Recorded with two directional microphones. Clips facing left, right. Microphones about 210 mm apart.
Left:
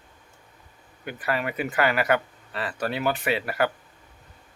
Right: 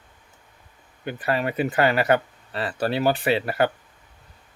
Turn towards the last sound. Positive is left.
turn(degrees=-30)  # may be behind; listen again after turning